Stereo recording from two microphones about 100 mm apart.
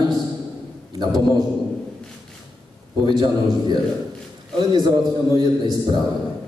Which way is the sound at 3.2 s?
45° right (ahead or behind).